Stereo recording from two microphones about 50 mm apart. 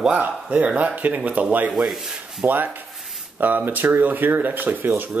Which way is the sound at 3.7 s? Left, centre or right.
Right.